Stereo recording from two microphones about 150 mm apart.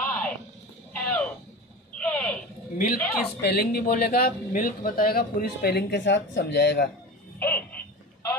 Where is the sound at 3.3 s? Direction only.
90° left.